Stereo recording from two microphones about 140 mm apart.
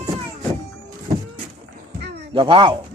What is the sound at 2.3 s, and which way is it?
Speech, 35° right (ahead or behind).